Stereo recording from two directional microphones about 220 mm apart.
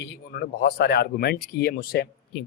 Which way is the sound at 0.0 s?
45° left (ahead or behind).